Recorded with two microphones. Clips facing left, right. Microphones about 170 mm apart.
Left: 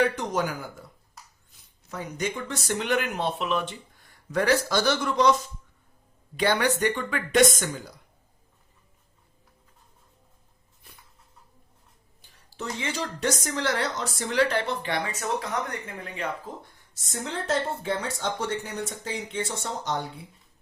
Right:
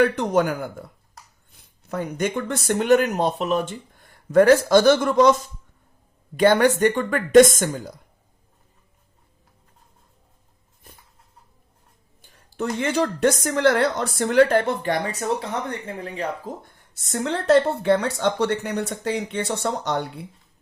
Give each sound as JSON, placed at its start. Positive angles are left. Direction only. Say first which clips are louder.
{"t": 0.0, "sound": "speech", "louder": "right 6 dB", "side_deg": -55}
{"t": 6.3, "sound": "speech", "louder": "right 8 dB", "side_deg": -45}
{"t": 12.2, "sound": "speech", "louder": "right 8 dB", "side_deg": -50}
{"t": 16.9, "sound": "speech", "louder": "right 8 dB", "side_deg": -65}